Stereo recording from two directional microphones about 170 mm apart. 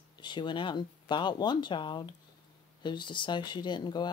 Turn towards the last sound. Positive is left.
turn(degrees=25)  # may be behind; listen again after turning